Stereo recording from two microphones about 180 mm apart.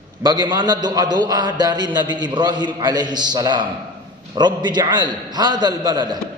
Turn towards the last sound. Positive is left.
turn(degrees=-20)  # may be behind; listen again after turning